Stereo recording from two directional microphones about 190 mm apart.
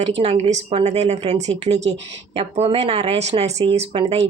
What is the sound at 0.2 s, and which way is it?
A woman's voice, 35° right (ahead or behind).